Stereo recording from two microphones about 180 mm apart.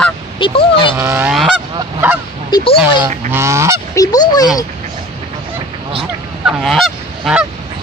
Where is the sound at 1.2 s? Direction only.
Centre (ahead or behind).